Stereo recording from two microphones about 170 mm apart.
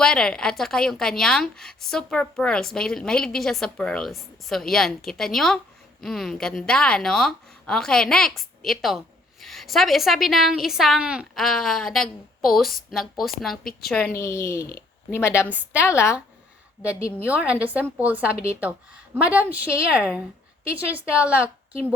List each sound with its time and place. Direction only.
0.0 s a woman's voice: 5° left (ahead or behind)
14.2 s speech: 15° left (ahead or behind)
15.4 s a woman's voice: 10° right (ahead or behind)
15.9 s speech: 15° left (ahead or behind)
17.2 s a woman's voice: 5° right (ahead or behind)